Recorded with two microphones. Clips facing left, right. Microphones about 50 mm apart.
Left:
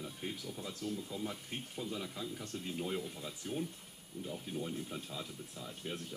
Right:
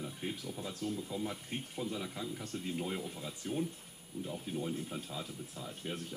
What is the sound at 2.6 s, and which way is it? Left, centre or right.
Speech, centre.